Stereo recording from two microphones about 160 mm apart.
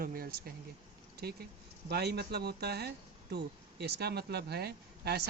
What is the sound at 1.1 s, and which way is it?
Speech, 80° right.